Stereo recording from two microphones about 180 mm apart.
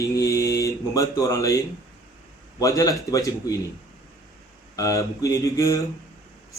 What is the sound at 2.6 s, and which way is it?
Speech, 20° left (ahead or behind).